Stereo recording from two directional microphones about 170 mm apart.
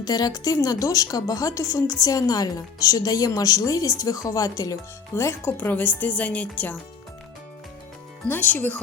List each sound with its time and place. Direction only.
0.0 s a woman's voice: 20° left (ahead or behind)
8.3 s speech: 10° left (ahead or behind)